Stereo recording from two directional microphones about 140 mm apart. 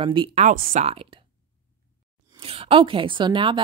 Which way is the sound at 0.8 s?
40° right (ahead or behind).